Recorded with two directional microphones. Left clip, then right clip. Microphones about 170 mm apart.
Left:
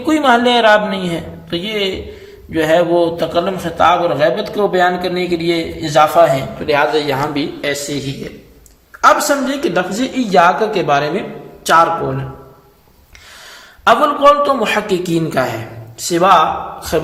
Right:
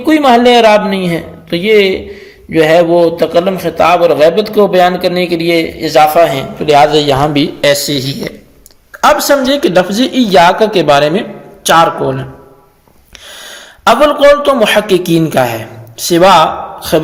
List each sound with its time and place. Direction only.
0.0 s a man's voice: 35° right (ahead or behind)
7.6 s a man's voice: 55° right (ahead or behind)
13.4 s a man's voice: 45° right (ahead or behind)